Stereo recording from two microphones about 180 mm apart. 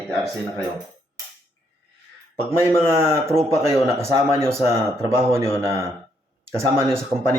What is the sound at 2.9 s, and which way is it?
Speech, 15° right (ahead or behind).